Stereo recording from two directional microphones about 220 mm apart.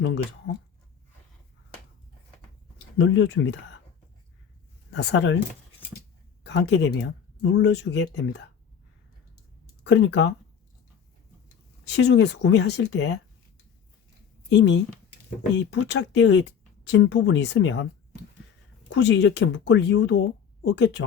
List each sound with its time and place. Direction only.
0.0 s speech: 55° left (ahead or behind)
3.0 s speech: 60° left (ahead or behind)
4.9 s speech: 50° left (ahead or behind)
6.4 s speech: 50° left (ahead or behind)
9.9 s speech: 55° left (ahead or behind)
11.9 s speech: 50° left (ahead or behind)
14.5 s speech: 55° left (ahead or behind)
18.9 s speech: 55° left (ahead or behind)